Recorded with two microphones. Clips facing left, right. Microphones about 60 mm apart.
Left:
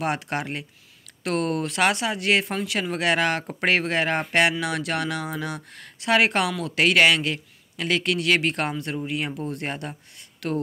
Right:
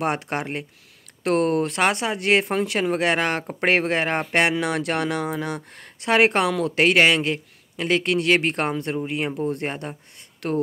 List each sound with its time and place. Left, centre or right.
0.0 s a man's voice: right
10.4 s speech: right